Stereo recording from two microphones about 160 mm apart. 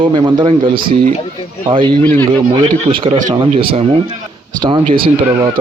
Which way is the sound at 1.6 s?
30° right (ahead or behind).